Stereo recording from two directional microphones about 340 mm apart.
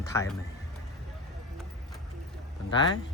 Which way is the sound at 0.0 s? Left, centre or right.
Centre.